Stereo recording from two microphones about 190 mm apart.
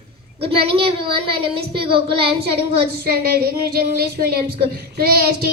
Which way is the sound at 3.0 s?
55° right (ahead or behind).